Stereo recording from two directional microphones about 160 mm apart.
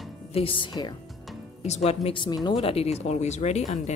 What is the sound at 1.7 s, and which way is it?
Speech, 45° left (ahead or behind).